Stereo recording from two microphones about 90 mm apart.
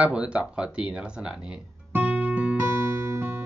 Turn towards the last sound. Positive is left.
turn(degrees=-20)  # may be behind; listen again after turning